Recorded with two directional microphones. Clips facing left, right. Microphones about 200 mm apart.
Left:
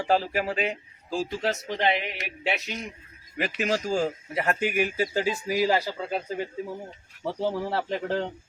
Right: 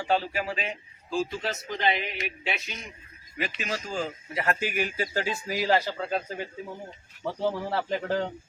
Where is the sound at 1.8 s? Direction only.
65° left (ahead or behind).